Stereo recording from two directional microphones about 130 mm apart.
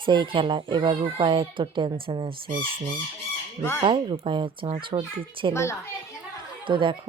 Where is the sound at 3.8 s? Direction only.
40° right (ahead or behind).